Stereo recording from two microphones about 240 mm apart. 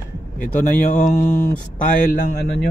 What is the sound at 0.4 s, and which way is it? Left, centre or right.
A man's voice, left.